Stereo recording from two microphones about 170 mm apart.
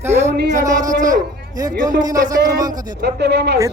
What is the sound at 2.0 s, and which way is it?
Speech, 20° right (ahead or behind).